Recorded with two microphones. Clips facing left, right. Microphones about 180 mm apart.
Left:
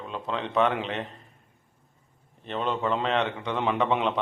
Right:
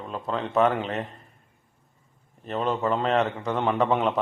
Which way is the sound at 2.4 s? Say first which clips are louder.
Right 2 dB; centre (ahead or behind).